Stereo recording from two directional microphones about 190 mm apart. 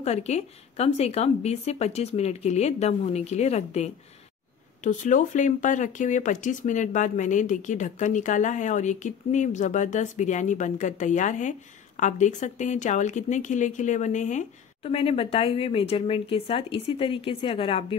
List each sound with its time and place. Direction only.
0.0 s speech: 35° left (ahead or behind)